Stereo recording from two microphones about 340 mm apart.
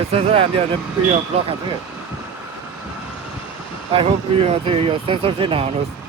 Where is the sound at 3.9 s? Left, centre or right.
Centre.